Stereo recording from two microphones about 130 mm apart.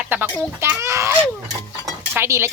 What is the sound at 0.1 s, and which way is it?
Chicken, 15° right (ahead or behind).